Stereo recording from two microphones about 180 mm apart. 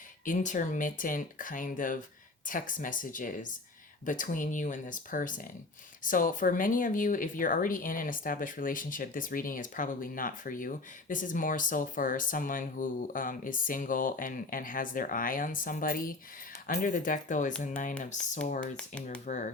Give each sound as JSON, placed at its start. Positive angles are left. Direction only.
{"t": 0.3, "sound": "speech", "side_deg": 45}